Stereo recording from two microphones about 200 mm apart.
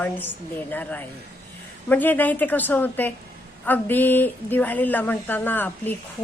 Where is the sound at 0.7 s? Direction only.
10° left (ahead or behind).